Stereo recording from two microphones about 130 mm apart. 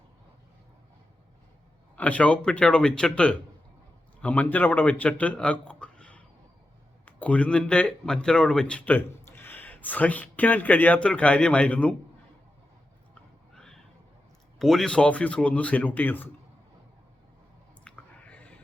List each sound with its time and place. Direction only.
2.0 s speech: 10° left (ahead or behind)
13.1 s horse: 5° left (ahead or behind)
14.6 s speech: 5° left (ahead or behind)
17.8 s chewing: 10° left (ahead or behind)